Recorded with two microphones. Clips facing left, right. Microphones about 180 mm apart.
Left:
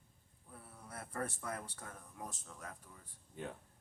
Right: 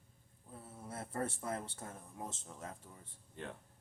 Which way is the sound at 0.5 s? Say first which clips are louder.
Right 4 dB; 25° right (ahead or behind).